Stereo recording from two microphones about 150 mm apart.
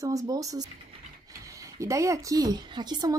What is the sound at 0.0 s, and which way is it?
Speech, 20° right (ahead or behind).